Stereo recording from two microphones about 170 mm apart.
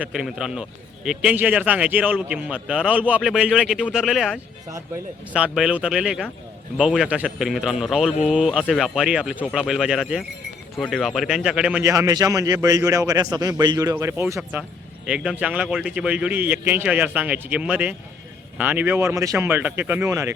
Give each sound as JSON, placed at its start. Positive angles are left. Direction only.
{"t": 0.0, "sound": "a man's voice", "side_deg": -5}
{"t": 11.8, "sound": "a man's voice", "side_deg": -20}
{"t": 15.0, "sound": "speech", "side_deg": -5}